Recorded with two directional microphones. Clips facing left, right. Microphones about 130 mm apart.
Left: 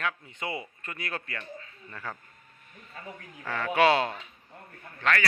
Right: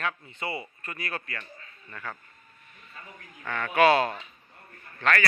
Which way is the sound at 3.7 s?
20° left (ahead or behind).